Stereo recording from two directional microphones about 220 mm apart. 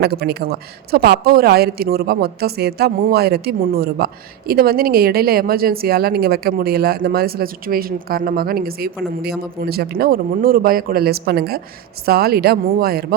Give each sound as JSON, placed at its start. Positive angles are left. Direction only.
{"t": 0.0, "sound": "a woman's voice", "side_deg": -45}